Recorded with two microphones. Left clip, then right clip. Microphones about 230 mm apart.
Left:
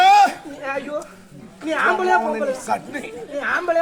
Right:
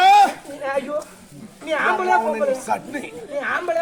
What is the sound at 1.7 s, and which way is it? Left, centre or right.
Speech, left.